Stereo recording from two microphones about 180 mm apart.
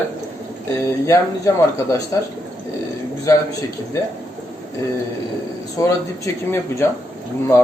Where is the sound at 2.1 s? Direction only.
15° left (ahead or behind).